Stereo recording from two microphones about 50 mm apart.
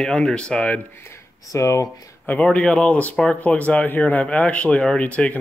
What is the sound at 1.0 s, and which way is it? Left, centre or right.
Speech, left.